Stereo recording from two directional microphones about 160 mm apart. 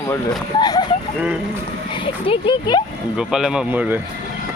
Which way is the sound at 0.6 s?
25° left (ahead or behind).